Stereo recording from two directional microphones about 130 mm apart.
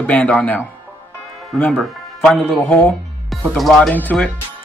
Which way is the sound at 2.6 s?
15° left (ahead or behind).